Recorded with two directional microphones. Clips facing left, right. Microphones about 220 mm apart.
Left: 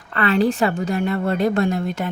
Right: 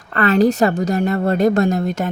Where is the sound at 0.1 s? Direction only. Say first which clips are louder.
Right 4 dB; 45° right (ahead or behind).